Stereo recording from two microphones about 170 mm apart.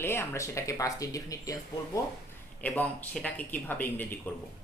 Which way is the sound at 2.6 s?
10° left (ahead or behind).